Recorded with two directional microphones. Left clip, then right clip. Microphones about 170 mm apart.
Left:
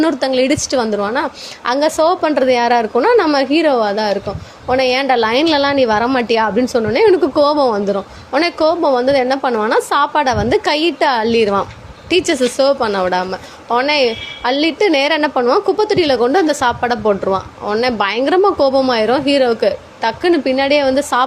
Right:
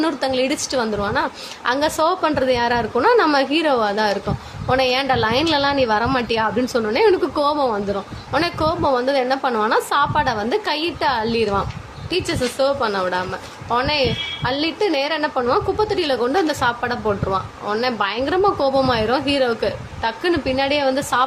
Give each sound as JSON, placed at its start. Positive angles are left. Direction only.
{"t": 0.0, "sound": "a woman's voice", "side_deg": 30}